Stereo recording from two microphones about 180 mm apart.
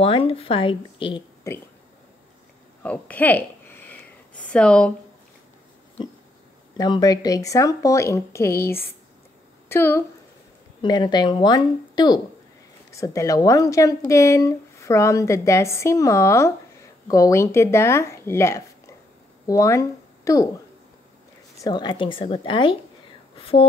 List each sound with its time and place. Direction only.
0.0 s speech: 30° left (ahead or behind)
2.8 s a sound: 10° left (ahead or behind)
6.8 s speech: 20° left (ahead or behind)
10.8 s speech: 25° left (ahead or behind)
21.5 s speech: 25° left (ahead or behind)